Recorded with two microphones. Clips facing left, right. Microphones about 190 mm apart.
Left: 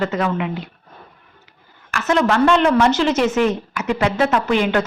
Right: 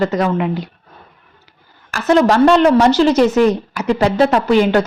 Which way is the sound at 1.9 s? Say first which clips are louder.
Right 5 dB; 35° right (ahead or behind).